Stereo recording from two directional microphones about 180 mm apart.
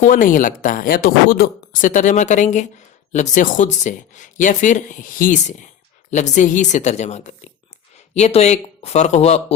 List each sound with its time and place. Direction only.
0.0 s a woman's voice: 45° left (ahead or behind)